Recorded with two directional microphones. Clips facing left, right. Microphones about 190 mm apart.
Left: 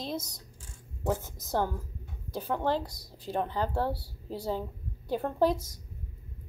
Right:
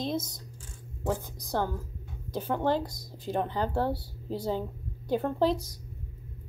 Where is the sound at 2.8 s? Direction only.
50° right (ahead or behind).